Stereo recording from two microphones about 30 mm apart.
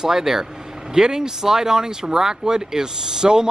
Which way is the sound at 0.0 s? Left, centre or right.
Centre.